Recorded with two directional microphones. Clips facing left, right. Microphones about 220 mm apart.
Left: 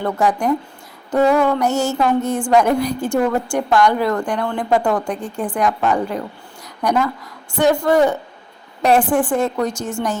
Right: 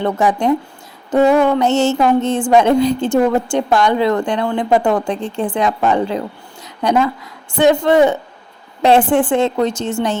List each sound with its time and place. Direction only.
0.0 s a woman's voice: 20° right (ahead or behind)